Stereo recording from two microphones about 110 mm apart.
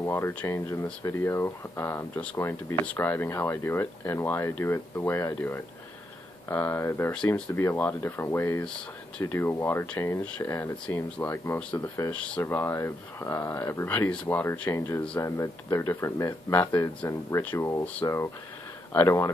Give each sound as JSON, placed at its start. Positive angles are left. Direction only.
{"t": 0.0, "sound": "speech", "side_deg": 20}
{"t": 12.4, "sound": "speech", "side_deg": 20}